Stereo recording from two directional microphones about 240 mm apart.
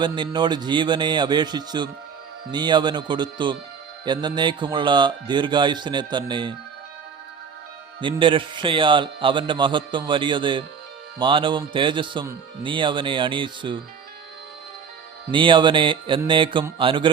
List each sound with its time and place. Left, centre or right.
0.0 s a man's voice: centre
8.0 s a man's voice: right
15.3 s a man's voice: centre